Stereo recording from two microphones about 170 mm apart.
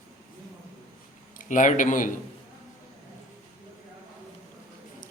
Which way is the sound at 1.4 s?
50° left (ahead or behind).